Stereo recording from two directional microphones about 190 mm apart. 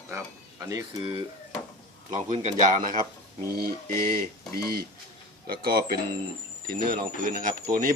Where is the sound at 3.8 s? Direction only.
15° left (ahead or behind).